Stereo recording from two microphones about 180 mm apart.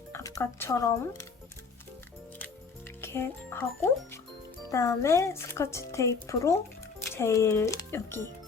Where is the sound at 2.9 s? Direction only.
15° left (ahead or behind).